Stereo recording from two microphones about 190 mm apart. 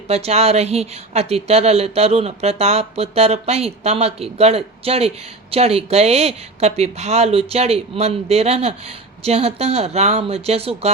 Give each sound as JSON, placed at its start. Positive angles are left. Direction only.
{"t": 0.1, "sound": "speech", "side_deg": -35}